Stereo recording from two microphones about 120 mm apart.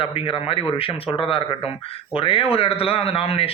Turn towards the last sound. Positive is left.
turn(degrees=55)  # may be behind; listen again after turning